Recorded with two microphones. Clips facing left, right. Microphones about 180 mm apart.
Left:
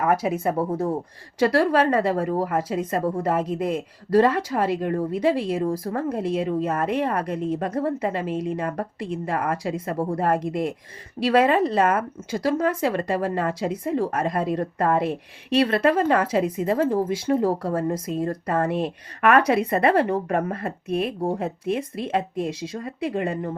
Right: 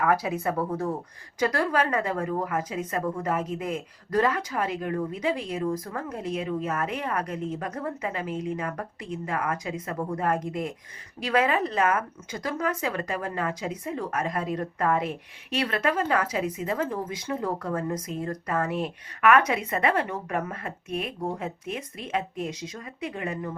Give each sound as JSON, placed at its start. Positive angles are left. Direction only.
{"t": 0.0, "sound": "a woman's voice", "side_deg": 20}